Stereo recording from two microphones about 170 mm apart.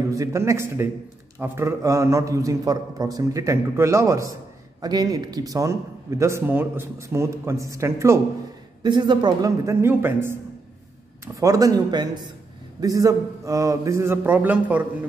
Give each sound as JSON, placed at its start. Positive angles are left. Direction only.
{"t": 0.1, "sound": "a woman's voice", "side_deg": -20}
{"t": 11.3, "sound": "a woman's voice", "side_deg": -20}